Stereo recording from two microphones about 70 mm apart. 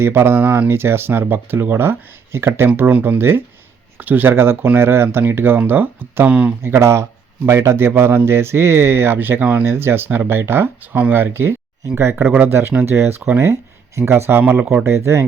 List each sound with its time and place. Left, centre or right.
0.0 s a man's voice: right
6.6 s a man's voice: right
9.6 s a man's voice: right
14.8 s a man's voice: right